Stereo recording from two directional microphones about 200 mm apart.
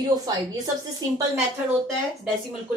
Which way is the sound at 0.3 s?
20° right (ahead or behind).